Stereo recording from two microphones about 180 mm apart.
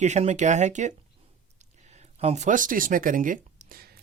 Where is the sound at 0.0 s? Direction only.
40° right (ahead or behind).